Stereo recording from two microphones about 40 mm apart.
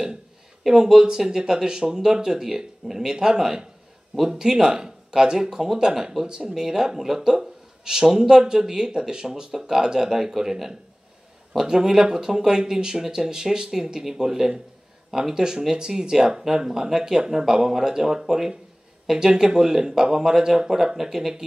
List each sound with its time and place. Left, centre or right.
0.7 s speech: centre